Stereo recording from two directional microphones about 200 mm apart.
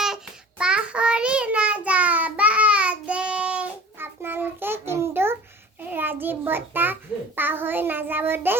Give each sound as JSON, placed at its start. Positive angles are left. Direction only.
{"t": 0.6, "sound": "child singing", "side_deg": -5}